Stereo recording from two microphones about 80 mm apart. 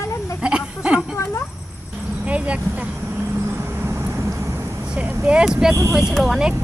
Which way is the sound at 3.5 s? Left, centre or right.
Right.